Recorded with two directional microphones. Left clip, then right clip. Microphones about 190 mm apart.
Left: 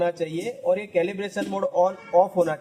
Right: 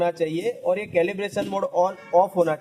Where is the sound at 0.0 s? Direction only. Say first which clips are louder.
Right 2 dB; 40° right (ahead or behind).